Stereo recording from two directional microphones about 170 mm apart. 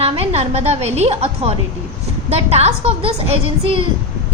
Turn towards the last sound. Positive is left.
turn(degrees=-35)  # may be behind; listen again after turning